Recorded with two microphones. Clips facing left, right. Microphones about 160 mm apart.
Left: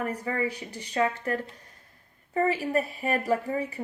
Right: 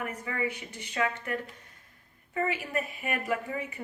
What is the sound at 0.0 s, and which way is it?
A woman's voice, 35° left (ahead or behind).